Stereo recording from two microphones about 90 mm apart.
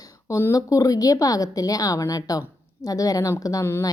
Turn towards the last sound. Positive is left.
turn(degrees=40)  # may be behind; listen again after turning